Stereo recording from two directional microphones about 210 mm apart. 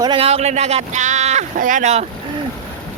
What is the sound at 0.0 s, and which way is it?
Speech, 25° right (ahead or behind).